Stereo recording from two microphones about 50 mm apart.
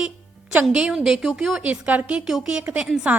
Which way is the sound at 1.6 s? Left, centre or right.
Right.